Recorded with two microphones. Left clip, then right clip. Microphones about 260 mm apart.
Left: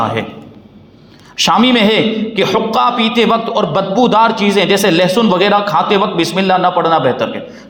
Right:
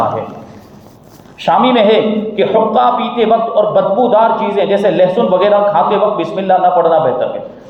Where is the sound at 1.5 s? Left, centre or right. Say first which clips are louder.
Right 3 dB; left.